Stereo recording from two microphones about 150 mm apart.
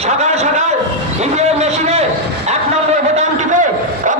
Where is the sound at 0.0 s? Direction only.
50° right (ahead or behind).